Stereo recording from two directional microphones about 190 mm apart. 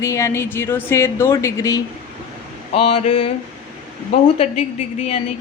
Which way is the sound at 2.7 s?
30° left (ahead or behind).